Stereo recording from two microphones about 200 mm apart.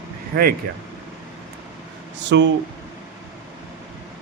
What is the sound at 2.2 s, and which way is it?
Speech, 60° right (ahead or behind).